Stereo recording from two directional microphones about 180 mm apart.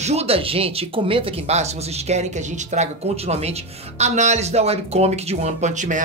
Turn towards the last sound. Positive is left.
turn(degrees=-45)  # may be behind; listen again after turning